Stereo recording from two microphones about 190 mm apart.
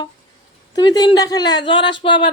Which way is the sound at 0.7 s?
20° left (ahead or behind).